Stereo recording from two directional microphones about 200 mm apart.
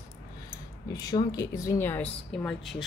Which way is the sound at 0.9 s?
20° left (ahead or behind).